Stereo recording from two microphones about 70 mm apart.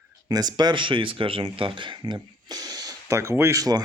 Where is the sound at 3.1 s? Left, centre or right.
Right.